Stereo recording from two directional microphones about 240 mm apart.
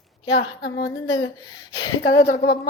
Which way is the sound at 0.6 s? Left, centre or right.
Left.